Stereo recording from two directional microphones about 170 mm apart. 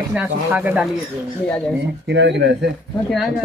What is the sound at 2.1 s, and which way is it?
Speech, 90° right.